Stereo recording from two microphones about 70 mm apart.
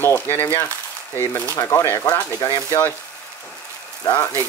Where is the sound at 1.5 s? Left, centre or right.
Left.